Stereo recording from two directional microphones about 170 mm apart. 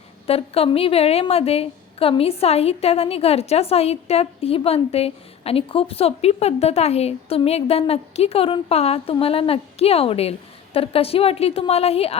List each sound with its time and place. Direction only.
0.3 s a woman's voice: 35° left (ahead or behind)